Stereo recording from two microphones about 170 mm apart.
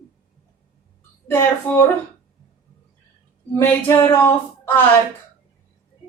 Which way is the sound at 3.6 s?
15° left (ahead or behind).